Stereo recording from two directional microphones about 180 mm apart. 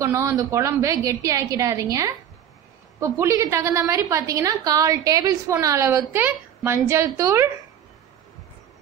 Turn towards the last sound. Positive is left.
turn(degrees=-15)  # may be behind; listen again after turning